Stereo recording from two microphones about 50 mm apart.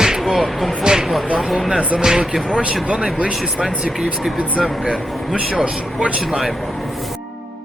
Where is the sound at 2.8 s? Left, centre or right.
Centre.